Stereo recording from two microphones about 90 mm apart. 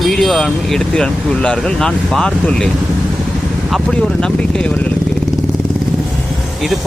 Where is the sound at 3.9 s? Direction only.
10° left (ahead or behind).